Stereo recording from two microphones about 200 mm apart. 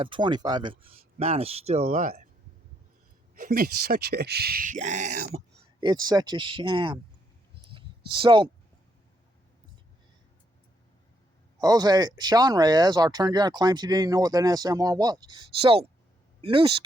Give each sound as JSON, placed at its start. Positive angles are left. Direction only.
{"t": 0.0, "sound": "speech", "side_deg": -25}
{"t": 3.3, "sound": "speech", "side_deg": -45}
{"t": 5.8, "sound": "speech", "side_deg": -20}
{"t": 7.7, "sound": "a sound", "side_deg": -25}
{"t": 11.6, "sound": "speech", "side_deg": -20}